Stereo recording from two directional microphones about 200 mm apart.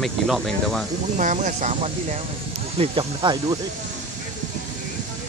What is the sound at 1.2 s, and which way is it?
Speech, 40° right (ahead or behind).